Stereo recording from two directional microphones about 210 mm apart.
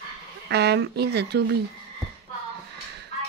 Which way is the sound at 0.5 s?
50° right (ahead or behind).